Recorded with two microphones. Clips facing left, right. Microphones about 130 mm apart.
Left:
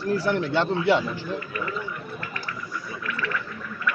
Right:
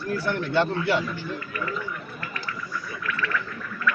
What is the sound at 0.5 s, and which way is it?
Speech, 20° left (ahead or behind).